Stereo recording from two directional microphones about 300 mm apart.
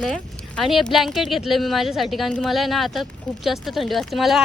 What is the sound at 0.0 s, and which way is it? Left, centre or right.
Speech, centre.